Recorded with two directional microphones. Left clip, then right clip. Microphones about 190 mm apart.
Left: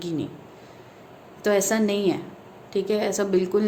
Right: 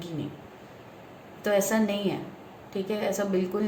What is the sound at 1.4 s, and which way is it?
A woman's voice, 50° left (ahead or behind).